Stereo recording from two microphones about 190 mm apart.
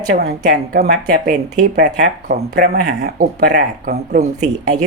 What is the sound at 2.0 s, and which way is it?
Speech, 60° right (ahead or behind).